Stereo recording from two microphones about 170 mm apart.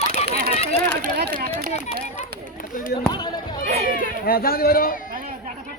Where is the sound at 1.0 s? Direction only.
65° right (ahead or behind).